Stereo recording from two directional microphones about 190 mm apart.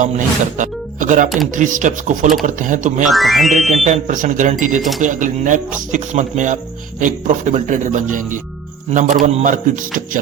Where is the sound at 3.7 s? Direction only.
40° right (ahead or behind).